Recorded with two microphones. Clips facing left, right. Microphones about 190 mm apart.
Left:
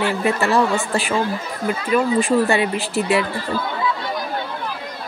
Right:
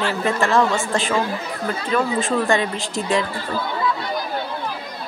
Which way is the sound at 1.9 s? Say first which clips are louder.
Left 4 dB; 15° left (ahead or behind).